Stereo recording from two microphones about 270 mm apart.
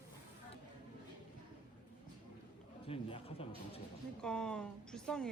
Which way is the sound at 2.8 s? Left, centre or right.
Left.